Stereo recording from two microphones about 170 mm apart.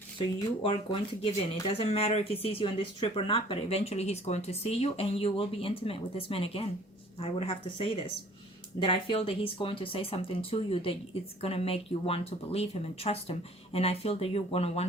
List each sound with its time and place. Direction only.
0.6 s speech: 30° left (ahead or behind)